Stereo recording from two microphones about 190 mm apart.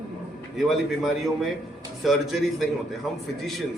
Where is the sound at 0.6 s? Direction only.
Centre (ahead or behind).